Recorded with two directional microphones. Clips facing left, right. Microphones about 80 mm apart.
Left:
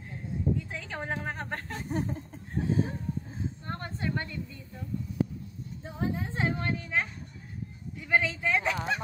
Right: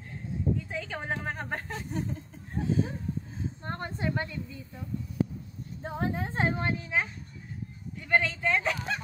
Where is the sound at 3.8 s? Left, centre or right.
Centre.